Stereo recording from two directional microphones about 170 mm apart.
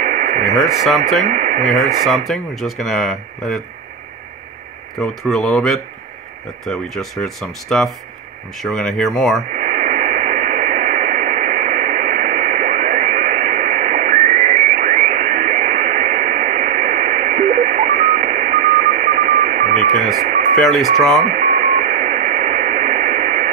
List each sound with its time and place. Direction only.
0.0 s radio: 45° right (ahead or behind)
0.6 s speech: centre (ahead or behind)
1.2 s speech: 45° right (ahead or behind)
1.7 s speech: centre (ahead or behind)
4.9 s speech: centre (ahead or behind)
9.5 s radio: 45° right (ahead or behind)
20.6 s speech: centre (ahead or behind)
21.3 s sidetone: 45° right (ahead or behind)